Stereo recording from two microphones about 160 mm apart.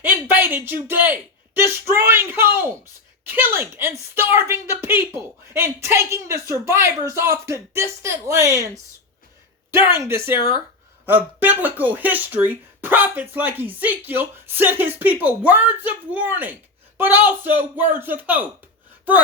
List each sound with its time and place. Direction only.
0.0 s speech: 15° right (ahead or behind)